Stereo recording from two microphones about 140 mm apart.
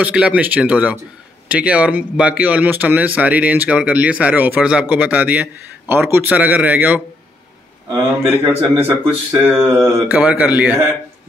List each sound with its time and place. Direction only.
0.0 s speech: 10° right (ahead or behind)
8.1 s speech: 15° right (ahead or behind)